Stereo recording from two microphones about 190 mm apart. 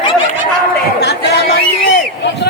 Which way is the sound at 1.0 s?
60° left (ahead or behind).